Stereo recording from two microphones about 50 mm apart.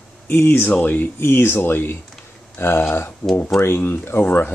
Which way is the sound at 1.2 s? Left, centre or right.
Left.